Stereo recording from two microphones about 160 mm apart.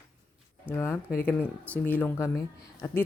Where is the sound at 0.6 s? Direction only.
15° left (ahead or behind).